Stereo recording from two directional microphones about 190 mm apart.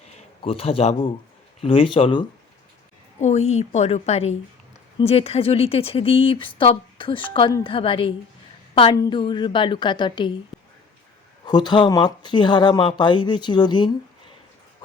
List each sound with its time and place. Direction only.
0.4 s a woman's voice: 30° left (ahead or behind)
11.4 s speech: 25° left (ahead or behind)